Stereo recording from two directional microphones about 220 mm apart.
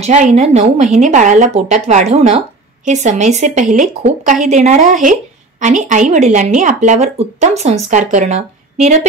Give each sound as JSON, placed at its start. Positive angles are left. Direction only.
{"t": 0.0, "sound": "a woman's voice", "side_deg": -30}